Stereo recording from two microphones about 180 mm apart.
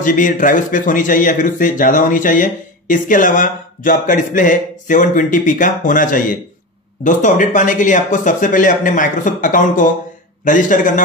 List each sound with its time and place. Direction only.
0.0 s speech: 45° left (ahead or behind)